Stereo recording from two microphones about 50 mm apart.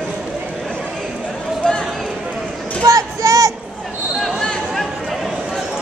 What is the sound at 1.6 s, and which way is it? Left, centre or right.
Run, centre.